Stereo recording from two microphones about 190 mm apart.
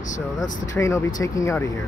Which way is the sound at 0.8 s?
15° left (ahead or behind).